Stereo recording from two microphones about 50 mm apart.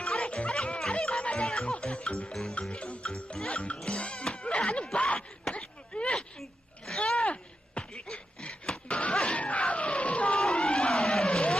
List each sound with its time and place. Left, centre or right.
0.1 s music: left
4.9 s speech: left
5.5 s throat clearing: left
6.4 s a sound: centre
7.0 s a sound: left
10.5 s vehicle: left